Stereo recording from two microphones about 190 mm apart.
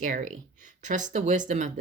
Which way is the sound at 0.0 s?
45° right (ahead or behind).